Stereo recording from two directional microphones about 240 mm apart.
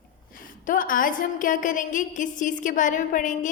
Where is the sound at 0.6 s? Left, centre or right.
Left.